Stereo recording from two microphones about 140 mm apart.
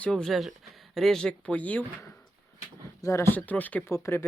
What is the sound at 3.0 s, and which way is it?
Speech, 20° left (ahead or behind).